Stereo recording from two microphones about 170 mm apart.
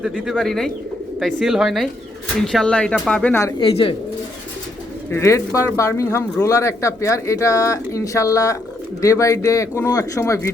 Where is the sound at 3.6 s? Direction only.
30° left (ahead or behind).